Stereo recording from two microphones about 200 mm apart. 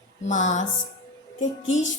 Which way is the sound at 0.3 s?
35° left (ahead or behind).